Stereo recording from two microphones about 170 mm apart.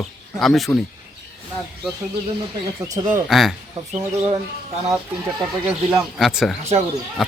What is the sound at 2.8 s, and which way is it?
Speech, 20° right (ahead or behind).